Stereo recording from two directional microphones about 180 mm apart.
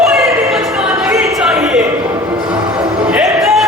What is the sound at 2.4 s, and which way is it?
Music, 5° right (ahead or behind).